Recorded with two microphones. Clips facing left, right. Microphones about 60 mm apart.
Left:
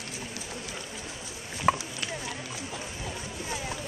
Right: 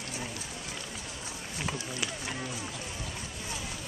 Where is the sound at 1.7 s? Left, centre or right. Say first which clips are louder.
Left 13 dB; left.